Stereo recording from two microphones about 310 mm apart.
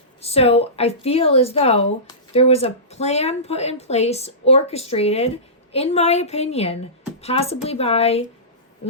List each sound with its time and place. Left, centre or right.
0.2 s speech: centre